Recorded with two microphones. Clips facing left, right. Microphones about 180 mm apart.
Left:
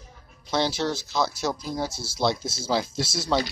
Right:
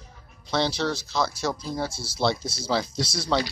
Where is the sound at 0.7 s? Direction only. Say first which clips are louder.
Even; 20° left (ahead or behind).